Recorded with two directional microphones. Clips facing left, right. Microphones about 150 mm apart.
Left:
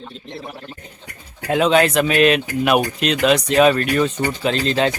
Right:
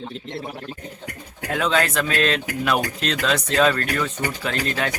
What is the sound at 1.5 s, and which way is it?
Speech, 20° left (ahead or behind).